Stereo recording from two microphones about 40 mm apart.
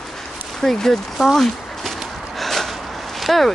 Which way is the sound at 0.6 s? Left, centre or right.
Centre.